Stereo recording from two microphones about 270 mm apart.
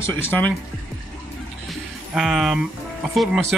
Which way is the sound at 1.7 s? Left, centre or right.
Centre.